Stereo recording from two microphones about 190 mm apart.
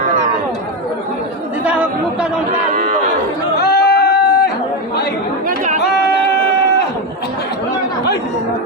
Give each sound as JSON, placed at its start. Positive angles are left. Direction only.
{"t": 1.6, "sound": "chatter", "side_deg": -5}
{"t": 3.6, "sound": "a sound", "side_deg": 55}
{"t": 5.5, "sound": "chatter", "side_deg": -40}